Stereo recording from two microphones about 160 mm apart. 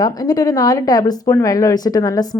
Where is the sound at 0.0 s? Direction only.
25° left (ahead or behind).